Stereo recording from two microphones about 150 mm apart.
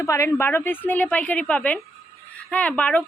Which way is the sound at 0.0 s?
20° left (ahead or behind).